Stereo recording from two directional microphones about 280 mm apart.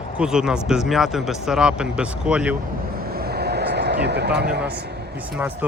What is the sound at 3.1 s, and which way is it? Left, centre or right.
Vehicle, right.